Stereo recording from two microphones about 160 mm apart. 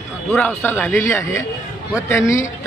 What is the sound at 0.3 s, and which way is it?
Speech, 10° left (ahead or behind).